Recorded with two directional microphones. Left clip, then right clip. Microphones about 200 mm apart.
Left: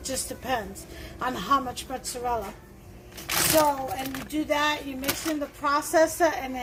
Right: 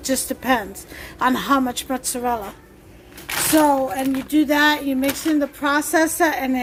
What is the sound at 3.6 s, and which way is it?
A woman's voice, 60° right (ahead or behind).